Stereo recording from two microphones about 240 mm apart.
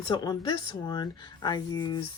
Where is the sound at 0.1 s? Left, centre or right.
Centre.